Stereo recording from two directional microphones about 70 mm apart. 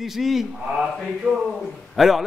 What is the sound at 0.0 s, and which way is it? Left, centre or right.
Speech, centre.